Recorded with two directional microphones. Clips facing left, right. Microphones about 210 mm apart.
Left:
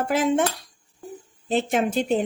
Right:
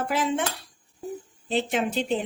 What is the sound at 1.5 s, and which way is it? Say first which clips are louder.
Speech: left 3 dB; 45° left (ahead or behind).